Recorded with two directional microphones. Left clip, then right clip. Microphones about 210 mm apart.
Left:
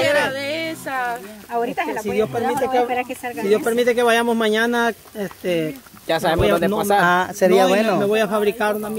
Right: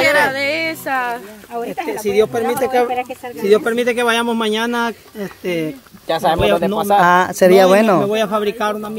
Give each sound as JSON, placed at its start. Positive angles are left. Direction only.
{"t": 0.0, "sound": "a sound", "side_deg": -50}
{"t": 1.5, "sound": "speech", "side_deg": 10}
{"t": 2.1, "sound": "speech", "side_deg": -40}
{"t": 3.7, "sound": "speech", "side_deg": -25}
{"t": 6.0, "sound": "speech", "side_deg": 5}
{"t": 7.0, "sound": "speech", "side_deg": -30}
{"t": 8.0, "sound": "a man's voice", "side_deg": -5}